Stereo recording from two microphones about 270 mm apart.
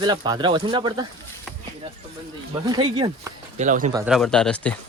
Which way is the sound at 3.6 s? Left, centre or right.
Right.